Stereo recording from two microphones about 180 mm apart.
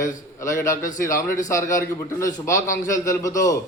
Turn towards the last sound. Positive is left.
turn(degrees=20)  # may be behind; listen again after turning